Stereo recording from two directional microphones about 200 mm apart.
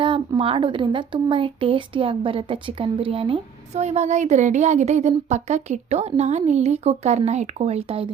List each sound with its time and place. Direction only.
0.0 s speech: 25° right (ahead or behind)